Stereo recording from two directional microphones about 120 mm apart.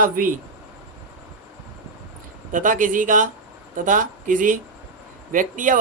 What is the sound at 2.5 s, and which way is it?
Speech, 90° right.